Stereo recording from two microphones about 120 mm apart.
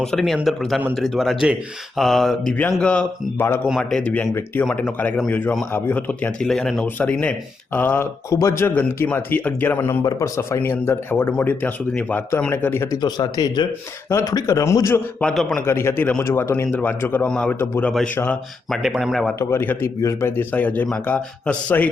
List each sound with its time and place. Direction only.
0.0 s mantra: 5° left (ahead or behind)
2.8 s speech: 10° left (ahead or behind)
3.4 s a man's voice: 20° left (ahead or behind)
3.7 s speech: 5° left (ahead or behind)
6.5 s mantra: 5° left (ahead or behind)
6.8 s a man's voice: 10° left (ahead or behind)
12.9 s a man's voice: 35° left (ahead or behind)
15.2 s mantra: 5° left (ahead or behind)
15.6 s a man's voice: 20° left (ahead or behind)
18.7 s mantra: centre (ahead or behind)
19.4 s a man's voice: 20° left (ahead or behind)